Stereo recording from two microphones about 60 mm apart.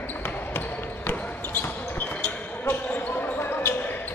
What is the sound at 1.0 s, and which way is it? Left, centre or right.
Basketball bounce, left.